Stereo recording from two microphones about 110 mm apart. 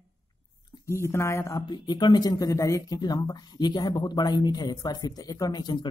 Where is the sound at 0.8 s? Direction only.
25° left (ahead or behind).